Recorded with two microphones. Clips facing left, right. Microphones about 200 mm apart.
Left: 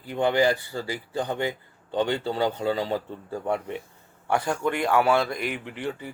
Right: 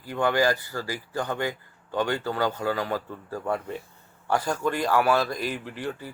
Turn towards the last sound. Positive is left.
turn(degrees=20)  # may be behind; listen again after turning